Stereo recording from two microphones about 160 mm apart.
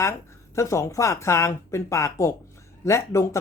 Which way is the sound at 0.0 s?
15° left (ahead or behind).